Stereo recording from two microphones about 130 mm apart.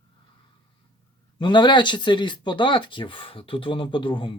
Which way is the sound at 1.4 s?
35° left (ahead or behind).